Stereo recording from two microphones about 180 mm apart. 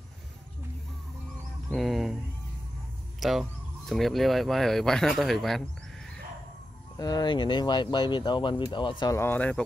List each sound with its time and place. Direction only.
1.7 s speech: centre (ahead or behind)
3.2 s speech: centre (ahead or behind)
7.0 s speech: 20° left (ahead or behind)
9.0 s speech: 15° left (ahead or behind)